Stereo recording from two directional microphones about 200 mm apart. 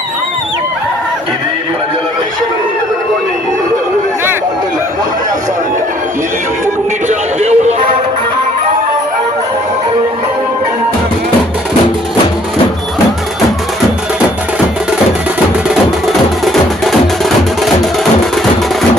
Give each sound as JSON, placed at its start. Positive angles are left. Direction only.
{"t": 7.1, "sound": "music", "side_deg": -35}